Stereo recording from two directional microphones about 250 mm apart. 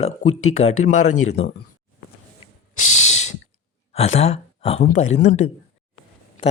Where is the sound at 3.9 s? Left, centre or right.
Left.